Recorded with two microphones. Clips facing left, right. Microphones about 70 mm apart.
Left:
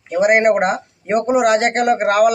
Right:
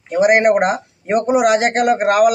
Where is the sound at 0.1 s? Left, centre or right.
Centre.